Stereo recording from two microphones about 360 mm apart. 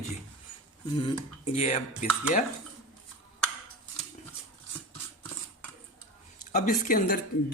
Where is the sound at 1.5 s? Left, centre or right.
Centre.